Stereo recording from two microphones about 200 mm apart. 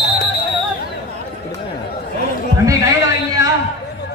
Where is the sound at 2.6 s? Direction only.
15° right (ahead or behind).